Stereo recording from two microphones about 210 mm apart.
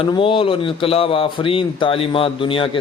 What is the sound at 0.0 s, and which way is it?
Speech, 25° left (ahead or behind).